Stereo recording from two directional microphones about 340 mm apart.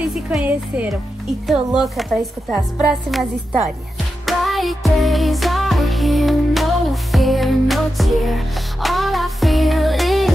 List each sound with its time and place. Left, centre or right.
0.1 s a woman's voice: centre
4.3 s music: centre